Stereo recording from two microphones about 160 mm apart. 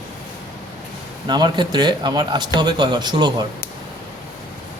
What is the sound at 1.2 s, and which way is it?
Speech, 25° right (ahead or behind).